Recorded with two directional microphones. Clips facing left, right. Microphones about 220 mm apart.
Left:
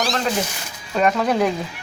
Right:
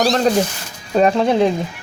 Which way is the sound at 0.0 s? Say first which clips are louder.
Right 7 dB; 40° right (ahead or behind).